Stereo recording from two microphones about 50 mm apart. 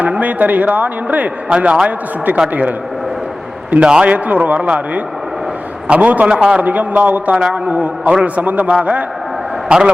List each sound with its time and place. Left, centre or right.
0.0 s speech: right
1.5 s a man's voice: right
2.5 s a man's voice: right
3.7 s a man's voice: right
6.2 s a man's voice: centre
6.6 s a man's voice: right